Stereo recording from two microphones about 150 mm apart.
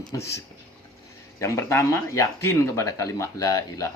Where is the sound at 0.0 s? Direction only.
20° left (ahead or behind).